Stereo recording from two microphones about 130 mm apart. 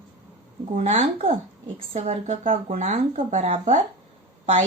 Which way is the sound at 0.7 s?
60° right (ahead or behind).